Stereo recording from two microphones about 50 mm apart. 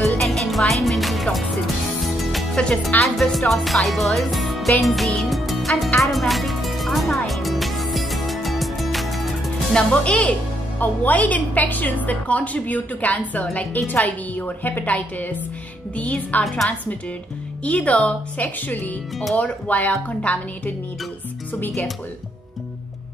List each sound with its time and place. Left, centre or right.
0.0 s music: centre
3.0 s speech: centre
5.3 s music: centre
9.8 s a woman's voice: centre
10.8 s a woman's voice: left
17.6 s a woman's voice: left